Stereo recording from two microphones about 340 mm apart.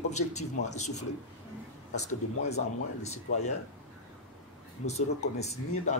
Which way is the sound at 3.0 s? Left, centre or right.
Centre.